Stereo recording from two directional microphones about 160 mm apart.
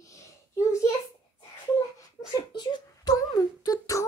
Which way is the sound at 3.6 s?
20° left (ahead or behind).